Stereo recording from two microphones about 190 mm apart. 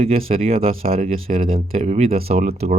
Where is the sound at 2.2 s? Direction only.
55° right (ahead or behind).